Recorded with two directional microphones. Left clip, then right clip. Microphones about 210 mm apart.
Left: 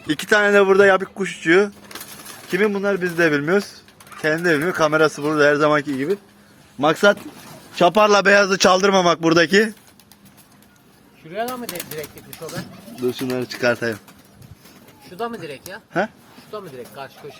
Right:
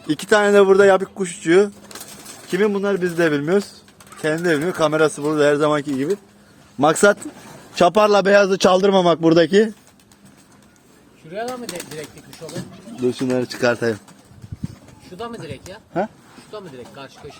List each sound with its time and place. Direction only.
0.1 s speech: 10° right (ahead or behind)
1.9 s a sound: 45° right (ahead or behind)
2.5 s speech: 15° right (ahead or behind)
6.7 s a man's voice: 40° right (ahead or behind)
8.1 s speech: 15° right (ahead or behind)
11.3 s speech: 20° left (ahead or behind)
13.3 s speech: 35° right (ahead or behind)
15.1 s speech: 15° left (ahead or behind)
16.5 s speech: 25° left (ahead or behind)